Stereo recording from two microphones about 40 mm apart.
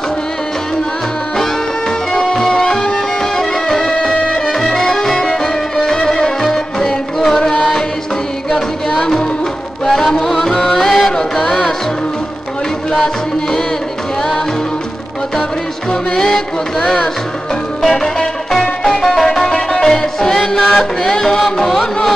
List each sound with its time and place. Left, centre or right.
1.3 s music: centre
12.9 s music: centre
15.9 s music: centre
16.3 s music: centre